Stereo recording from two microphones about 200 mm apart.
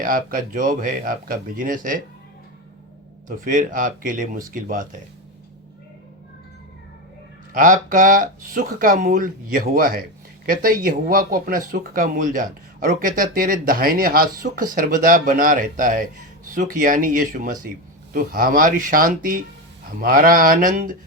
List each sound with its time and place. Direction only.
0.0 s speech: 45° right (ahead or behind)
3.2 s speech: 40° right (ahead or behind)
7.5 s speech: 40° right (ahead or behind)